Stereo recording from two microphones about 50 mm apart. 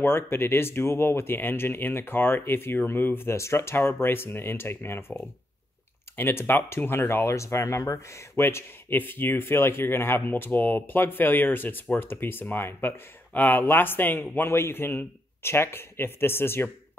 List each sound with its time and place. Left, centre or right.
0.0 s speech: left
3.3 s speech: left
3.7 s speech: left
7.3 s speech: left
8.4 s speech: left
8.9 s speech: left
13.3 s speech: left
13.6 s speech: left
14.5 s speech: left